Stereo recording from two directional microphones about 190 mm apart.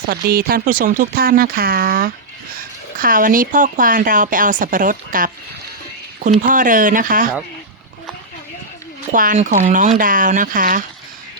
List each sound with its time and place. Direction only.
0.1 s speech: 50° right (ahead or behind)
6.4 s speech: 45° right (ahead or behind)
9.1 s speech: 45° right (ahead or behind)